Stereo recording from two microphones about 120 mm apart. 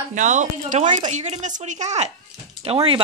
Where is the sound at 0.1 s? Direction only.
90° right.